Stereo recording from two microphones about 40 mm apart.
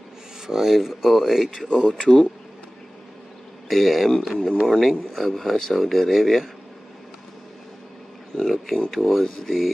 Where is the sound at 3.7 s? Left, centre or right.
Centre.